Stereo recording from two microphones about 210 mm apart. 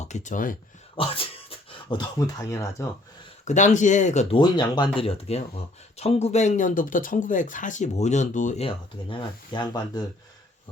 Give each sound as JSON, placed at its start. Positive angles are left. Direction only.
{"t": 0.0, "sound": "speech", "side_deg": 35}
{"t": 0.9, "sound": "speech", "side_deg": 25}
{"t": 3.4, "sound": "speech", "side_deg": 35}